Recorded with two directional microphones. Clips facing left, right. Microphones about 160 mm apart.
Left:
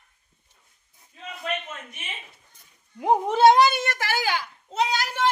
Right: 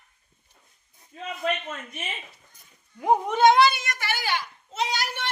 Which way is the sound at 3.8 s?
80° left.